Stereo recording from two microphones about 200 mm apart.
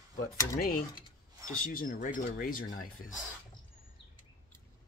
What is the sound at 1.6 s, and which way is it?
Speech, 45° left (ahead or behind).